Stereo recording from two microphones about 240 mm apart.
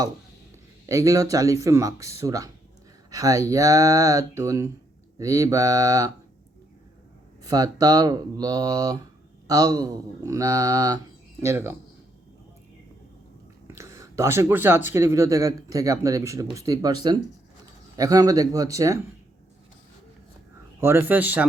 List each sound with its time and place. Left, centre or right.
0.9 s speech: centre
7.4 s speech: centre
13.7 s speech: centre
20.8 s speech: centre